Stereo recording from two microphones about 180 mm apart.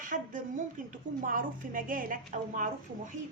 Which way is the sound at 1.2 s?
50° right (ahead or behind).